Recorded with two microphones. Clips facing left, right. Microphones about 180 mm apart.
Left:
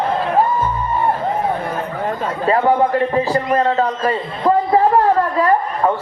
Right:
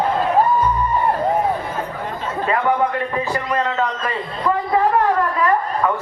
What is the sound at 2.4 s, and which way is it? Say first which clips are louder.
A man's voice: left 4 dB; 35° left (ahead or behind).